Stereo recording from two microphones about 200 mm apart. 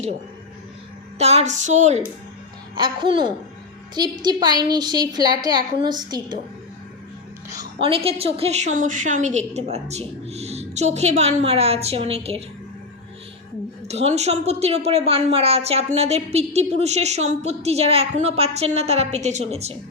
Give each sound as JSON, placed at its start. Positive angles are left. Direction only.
{"t": 1.2, "sound": "a woman's voice", "side_deg": -30}
{"t": 2.7, "sound": "a woman's voice", "side_deg": -25}
{"t": 7.5, "sound": "a woman's voice", "side_deg": -25}
{"t": 13.8, "sound": "a woman's voice", "side_deg": -30}